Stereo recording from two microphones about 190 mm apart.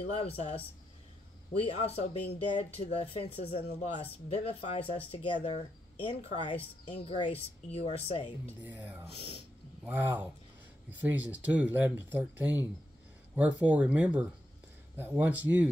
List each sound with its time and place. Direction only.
0.0 s speech: 30° left (ahead or behind)
8.6 s speech: 10° right (ahead or behind)